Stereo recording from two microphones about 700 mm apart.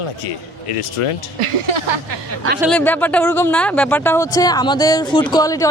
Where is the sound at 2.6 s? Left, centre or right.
Centre.